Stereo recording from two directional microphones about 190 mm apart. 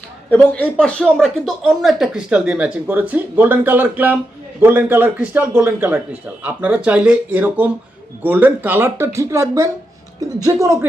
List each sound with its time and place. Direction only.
0.3 s speech: 5° left (ahead or behind); by 10.8 s 15° right (ahead or behind)